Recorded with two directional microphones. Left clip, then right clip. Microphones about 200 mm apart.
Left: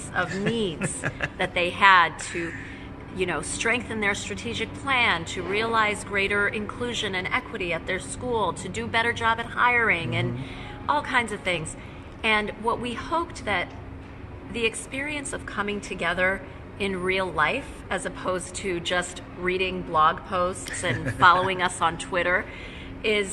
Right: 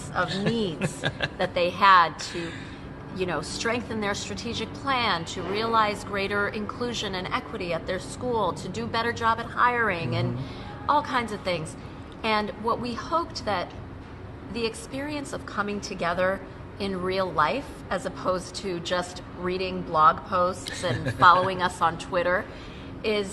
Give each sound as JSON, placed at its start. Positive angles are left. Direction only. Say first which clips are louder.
{"t": 0.8, "sound": "speech", "louder": "right 1 dB", "side_deg": -30}
{"t": 1.4, "sound": "a woman's voice", "louder": "left 1 dB", "side_deg": 0}
{"t": 20.9, "sound": "a woman's voice", "louder": "left 1 dB", "side_deg": -25}
{"t": 21.2, "sound": "a woman's voice", "louder": "even", "side_deg": 10}